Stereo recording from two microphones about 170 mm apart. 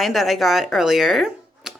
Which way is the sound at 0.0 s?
Centre (ahead or behind).